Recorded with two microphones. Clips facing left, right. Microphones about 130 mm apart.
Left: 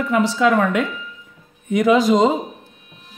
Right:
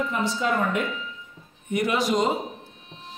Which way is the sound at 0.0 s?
90° left.